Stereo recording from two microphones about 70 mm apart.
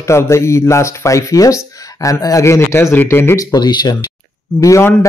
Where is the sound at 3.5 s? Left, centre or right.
Left.